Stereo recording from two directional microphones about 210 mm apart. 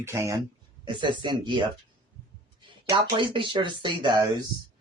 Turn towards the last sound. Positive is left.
turn(degrees=-20)  # may be behind; listen again after turning